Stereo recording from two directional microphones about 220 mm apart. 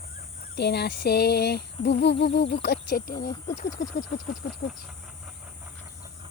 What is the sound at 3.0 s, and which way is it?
Speech, 15° left (ahead or behind).